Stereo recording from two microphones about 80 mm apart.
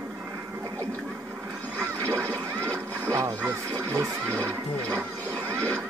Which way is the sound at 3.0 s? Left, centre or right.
Right.